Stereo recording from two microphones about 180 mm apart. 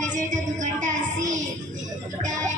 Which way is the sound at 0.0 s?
45° right (ahead or behind).